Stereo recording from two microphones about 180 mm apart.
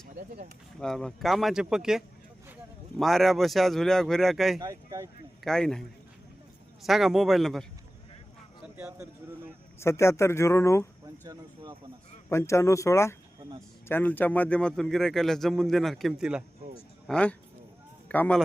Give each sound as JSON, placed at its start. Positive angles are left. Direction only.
{"t": 0.8, "sound": "speech", "side_deg": 5}
{"t": 4.6, "sound": "speech", "side_deg": -15}
{"t": 5.4, "sound": "a man's voice", "side_deg": 5}
{"t": 6.8, "sound": "speech", "side_deg": 0}
{"t": 8.6, "sound": "a sound", "side_deg": -10}
{"t": 9.8, "sound": "speech", "side_deg": 15}
{"t": 12.3, "sound": "speech", "side_deg": 15}